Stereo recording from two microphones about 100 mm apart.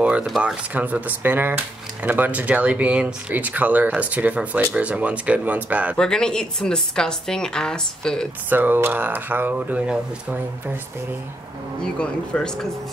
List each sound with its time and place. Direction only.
0.0 s a sound: 10° right (ahead or behind)
0.4 s speech: 15° right (ahead or behind)
5.9 s a woman's voice: 5° left (ahead or behind)
8.5 s speech: 20° right (ahead or behind)
11.8 s a woman's voice: 10° left (ahead or behind)